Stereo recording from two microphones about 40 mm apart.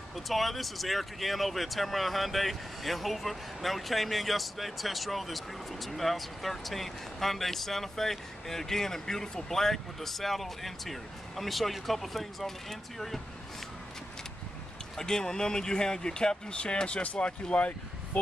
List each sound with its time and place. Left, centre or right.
0.1 s speech: centre
15.0 s speech: centre; by 18.2 s left